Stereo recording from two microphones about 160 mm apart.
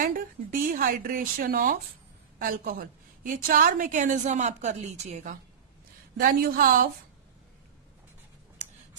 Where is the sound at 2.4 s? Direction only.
65° right (ahead or behind); by 5.3 s 45° right (ahead or behind).